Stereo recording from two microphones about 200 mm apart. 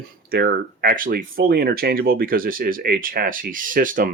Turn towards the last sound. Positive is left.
turn(degrees=-40)  # may be behind; listen again after turning